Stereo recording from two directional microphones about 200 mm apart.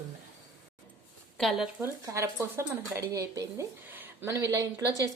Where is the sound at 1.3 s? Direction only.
Centre (ahead or behind).